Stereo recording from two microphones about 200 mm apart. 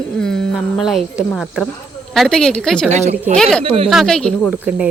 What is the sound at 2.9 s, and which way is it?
Speech, 35° right (ahead or behind).